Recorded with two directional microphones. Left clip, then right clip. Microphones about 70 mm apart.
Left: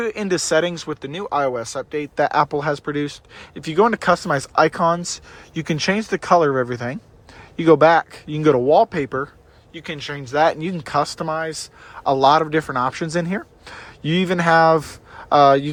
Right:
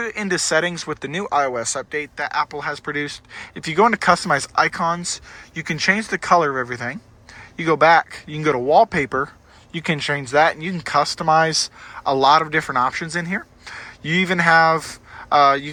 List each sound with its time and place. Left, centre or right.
0.0 s speech: centre
0.9 s speech: centre
2.1 s speech: left
2.8 s speech: centre
4.5 s speech: left; by 9.3 s centre
9.7 s speech: centre
10.4 s speech: left
11.3 s speech: centre
11.9 s speech: left
12.9 s speech: left